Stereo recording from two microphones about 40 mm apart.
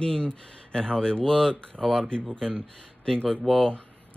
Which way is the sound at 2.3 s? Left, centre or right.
Left.